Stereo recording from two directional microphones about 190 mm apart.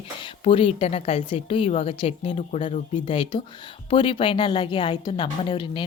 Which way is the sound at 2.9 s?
25° left (ahead or behind).